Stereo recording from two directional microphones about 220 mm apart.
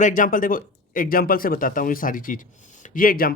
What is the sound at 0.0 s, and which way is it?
Speech, 35° left (ahead or behind).